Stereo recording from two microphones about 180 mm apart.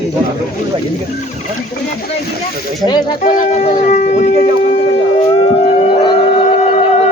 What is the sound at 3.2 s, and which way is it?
Speech, 40° left (ahead or behind).